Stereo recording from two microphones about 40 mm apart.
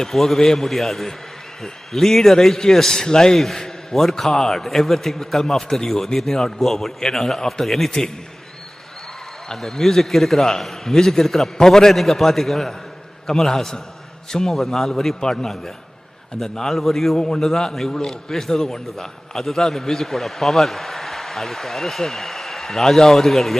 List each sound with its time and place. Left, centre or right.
0.0 s a man's voice: centre
0.7 s a man's voice: centre
9.6 s a man's voice: centre
11.9 s a man's voice: centre
17.2 s a man's voice: centre